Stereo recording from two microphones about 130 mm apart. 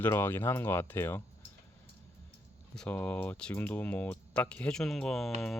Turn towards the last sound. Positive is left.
turn(degrees=0)  # may be behind; listen again after turning